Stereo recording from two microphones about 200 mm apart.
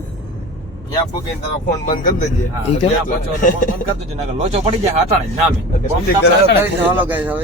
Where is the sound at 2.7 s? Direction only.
30° left (ahead or behind).